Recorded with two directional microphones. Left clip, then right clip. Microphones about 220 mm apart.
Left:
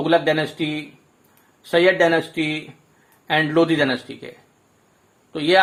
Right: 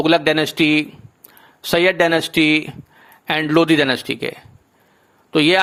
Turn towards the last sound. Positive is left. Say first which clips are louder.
# right 6 dB
turn(degrees=-35)  # may be behind; listen again after turning